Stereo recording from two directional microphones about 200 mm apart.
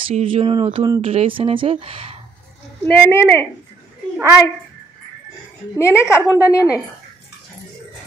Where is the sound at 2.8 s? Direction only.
10° left (ahead or behind).